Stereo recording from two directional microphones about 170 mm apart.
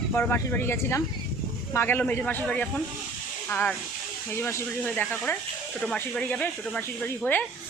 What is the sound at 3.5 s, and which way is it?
Speech, 10° left (ahead or behind).